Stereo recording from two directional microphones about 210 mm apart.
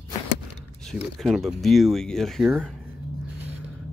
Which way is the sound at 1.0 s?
Centre (ahead or behind).